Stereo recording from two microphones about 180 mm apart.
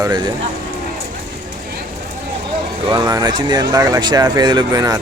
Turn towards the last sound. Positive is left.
turn(degrees=-20)  # may be behind; listen again after turning